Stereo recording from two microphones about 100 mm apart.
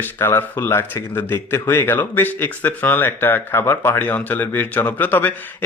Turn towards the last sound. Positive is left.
turn(degrees=20)  # may be behind; listen again after turning